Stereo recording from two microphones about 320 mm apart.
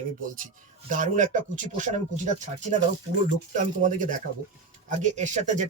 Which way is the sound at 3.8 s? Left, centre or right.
Right.